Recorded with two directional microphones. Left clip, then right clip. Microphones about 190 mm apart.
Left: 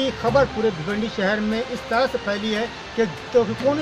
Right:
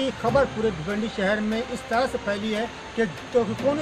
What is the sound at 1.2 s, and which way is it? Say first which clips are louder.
Speech: left 2 dB; centre (ahead or behind).